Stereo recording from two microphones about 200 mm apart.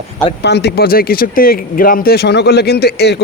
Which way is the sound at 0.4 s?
55° left (ahead or behind).